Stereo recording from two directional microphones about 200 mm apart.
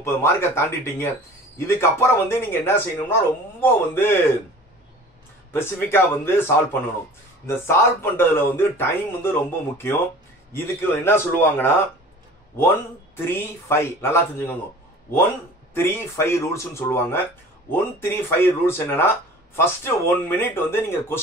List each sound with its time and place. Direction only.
0.0 s speech: 15° left (ahead or behind)
5.5 s speech: 10° left (ahead or behind)
13.1 s speech: 10° left (ahead or behind)
15.7 s speech: 10° left (ahead or behind)